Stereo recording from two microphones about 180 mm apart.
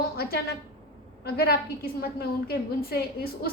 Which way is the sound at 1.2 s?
60° left (ahead or behind).